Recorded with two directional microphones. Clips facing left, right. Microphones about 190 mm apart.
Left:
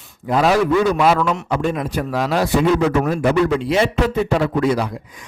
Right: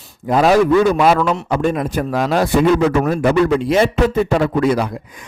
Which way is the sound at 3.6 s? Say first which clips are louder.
Right 3 dB; 45° right (ahead or behind).